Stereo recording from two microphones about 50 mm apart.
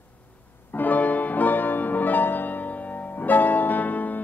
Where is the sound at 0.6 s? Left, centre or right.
Left.